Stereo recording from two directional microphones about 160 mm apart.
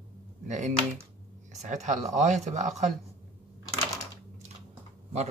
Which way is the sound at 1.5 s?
45° right (ahead or behind).